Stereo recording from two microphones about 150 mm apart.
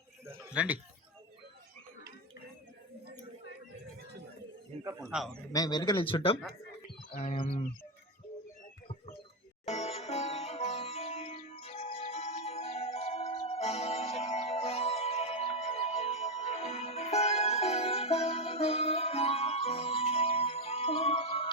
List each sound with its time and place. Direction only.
0.3 s a sound: 10° right (ahead or behind)
4.7 s a man's voice: 45° right (ahead or behind)
5.1 s a man's voice: centre (ahead or behind)
5.5 s speech: 25° left (ahead or behind)
6.8 s music: 45° left (ahead or behind)
9.6 s music: 45° left (ahead or behind)